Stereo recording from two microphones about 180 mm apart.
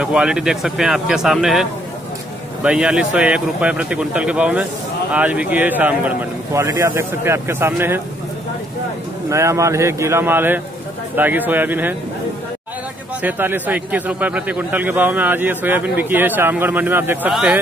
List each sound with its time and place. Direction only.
0.0 s a man's voice: 5° right (ahead or behind)
9.3 s a man's voice: 15° right (ahead or behind)
13.2 s a man's voice: 10° right (ahead or behind)